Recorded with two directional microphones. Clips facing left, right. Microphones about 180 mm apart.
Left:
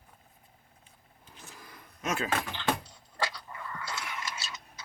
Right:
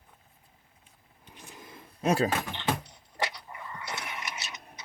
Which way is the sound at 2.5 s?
20° right (ahead or behind).